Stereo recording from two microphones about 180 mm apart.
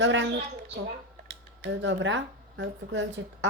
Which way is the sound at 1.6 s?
85° right.